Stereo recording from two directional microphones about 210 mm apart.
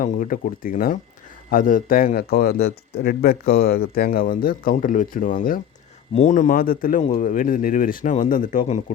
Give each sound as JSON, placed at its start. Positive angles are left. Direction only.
{"t": 0.0, "sound": "speech", "side_deg": 40}